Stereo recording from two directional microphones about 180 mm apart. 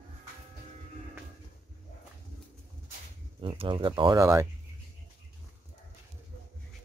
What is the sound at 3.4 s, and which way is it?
Speech, 30° right (ahead or behind).